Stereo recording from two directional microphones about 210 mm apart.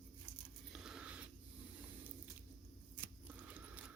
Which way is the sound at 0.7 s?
5° right (ahead or behind).